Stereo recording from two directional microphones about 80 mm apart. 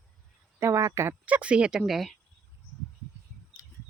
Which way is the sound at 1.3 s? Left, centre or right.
Centre.